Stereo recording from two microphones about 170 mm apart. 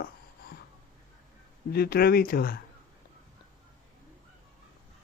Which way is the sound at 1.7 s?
70° left (ahead or behind).